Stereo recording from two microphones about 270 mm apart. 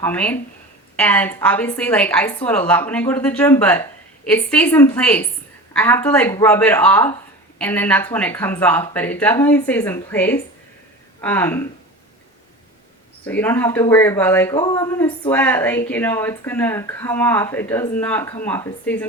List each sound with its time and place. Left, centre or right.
0.0 s a woman's voice: centre
13.2 s speech: centre